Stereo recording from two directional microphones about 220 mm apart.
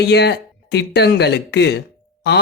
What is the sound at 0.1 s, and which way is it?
Speech, 50° left (ahead or behind).